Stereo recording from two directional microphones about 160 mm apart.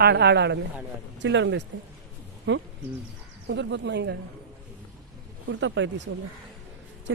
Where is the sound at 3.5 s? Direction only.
90° right.